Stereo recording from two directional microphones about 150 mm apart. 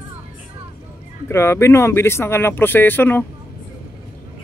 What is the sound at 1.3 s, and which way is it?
Speech, 15° left (ahead or behind).